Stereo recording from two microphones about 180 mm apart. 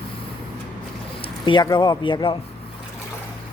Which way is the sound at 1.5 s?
25° left (ahead or behind).